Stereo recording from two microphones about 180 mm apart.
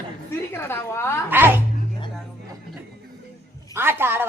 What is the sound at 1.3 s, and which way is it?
Speech, 10° right (ahead or behind).